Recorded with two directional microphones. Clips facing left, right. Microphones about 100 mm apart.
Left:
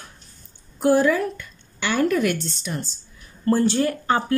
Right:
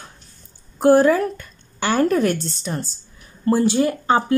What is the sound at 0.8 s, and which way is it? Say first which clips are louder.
A woman's voice: right 4 dB; 45° right (ahead or behind).